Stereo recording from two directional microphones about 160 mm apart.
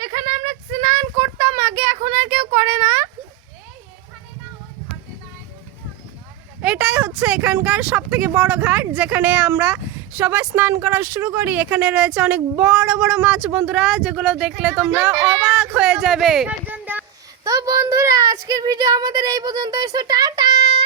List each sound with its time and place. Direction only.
0.0 s child singing: 30° right (ahead or behind)
6.6 s speech: 10° right (ahead or behind); by 20.8 s 30° right (ahead or behind)